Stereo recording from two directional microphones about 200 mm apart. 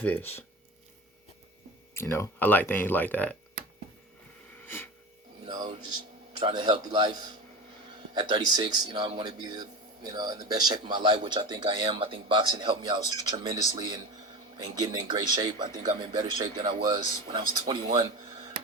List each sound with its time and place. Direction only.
0.0 s speech: 10° left (ahead or behind)
1.9 s speech: 10° left (ahead or behind)
4.6 s wheeze: 10° left (ahead or behind)
5.5 s speech: 20° right (ahead or behind)